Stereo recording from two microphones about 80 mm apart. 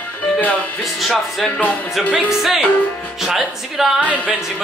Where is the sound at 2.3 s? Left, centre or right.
Centre.